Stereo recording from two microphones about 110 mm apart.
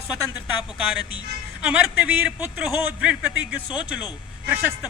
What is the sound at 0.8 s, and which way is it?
A man's voice, 10° right (ahead or behind).